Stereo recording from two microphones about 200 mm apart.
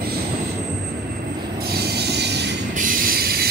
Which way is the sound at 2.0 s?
55° right (ahead or behind).